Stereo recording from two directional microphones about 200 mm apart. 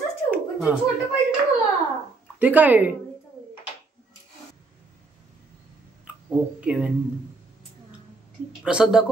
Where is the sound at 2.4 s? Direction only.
10° right (ahead or behind).